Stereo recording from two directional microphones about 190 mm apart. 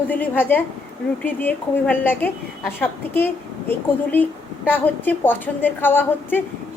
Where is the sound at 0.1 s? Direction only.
10° left (ahead or behind).